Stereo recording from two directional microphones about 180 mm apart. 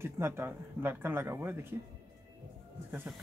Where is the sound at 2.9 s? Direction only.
Centre (ahead or behind).